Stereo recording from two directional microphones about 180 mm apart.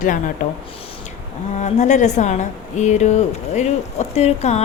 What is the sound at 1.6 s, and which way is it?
A woman's voice, 40° left (ahead or behind).